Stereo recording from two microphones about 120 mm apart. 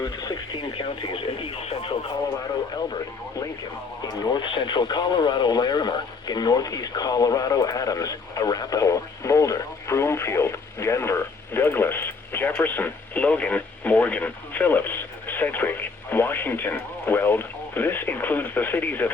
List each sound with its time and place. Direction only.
0.0 s speech: 30° left (ahead or behind); by 2.0 s 50° left (ahead or behind)
2.7 s speech: 35° left (ahead or behind); by 19.1 s 15° left (ahead or behind)